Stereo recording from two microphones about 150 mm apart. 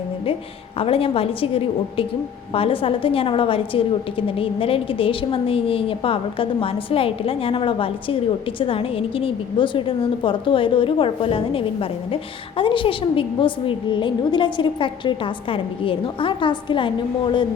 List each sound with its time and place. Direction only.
0.8 s a woman's voice: 40° left (ahead or behind)